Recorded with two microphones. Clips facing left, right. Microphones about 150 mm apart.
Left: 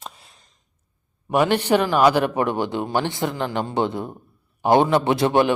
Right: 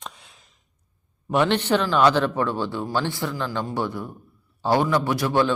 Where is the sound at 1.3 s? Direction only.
10° left (ahead or behind).